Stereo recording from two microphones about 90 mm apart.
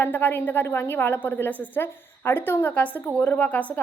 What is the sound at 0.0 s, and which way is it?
A woman's voice, 20° left (ahead or behind).